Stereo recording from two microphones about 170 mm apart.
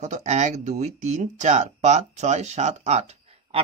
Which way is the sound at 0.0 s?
45° right (ahead or behind).